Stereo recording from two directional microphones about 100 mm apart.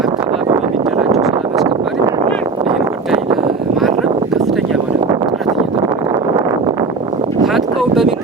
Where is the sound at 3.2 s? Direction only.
60° right (ahead or behind).